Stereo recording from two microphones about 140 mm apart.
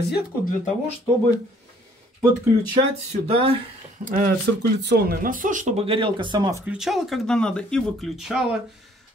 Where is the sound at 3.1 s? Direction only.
45° right (ahead or behind).